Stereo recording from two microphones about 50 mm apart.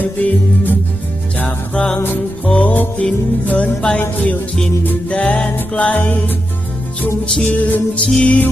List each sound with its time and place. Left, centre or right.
0.0 s music: left
1.7 s music: centre
5.0 s music: left
7.4 s music: left